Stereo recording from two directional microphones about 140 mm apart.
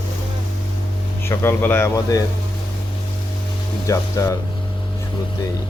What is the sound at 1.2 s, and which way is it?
Speech, 15° left (ahead or behind).